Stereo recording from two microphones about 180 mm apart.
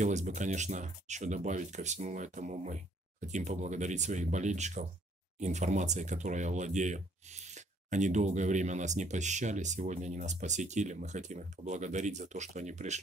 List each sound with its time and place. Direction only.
0.0 s speech: 40° right (ahead or behind)